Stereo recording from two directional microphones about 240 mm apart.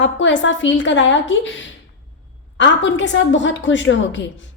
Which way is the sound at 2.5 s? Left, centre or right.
Left.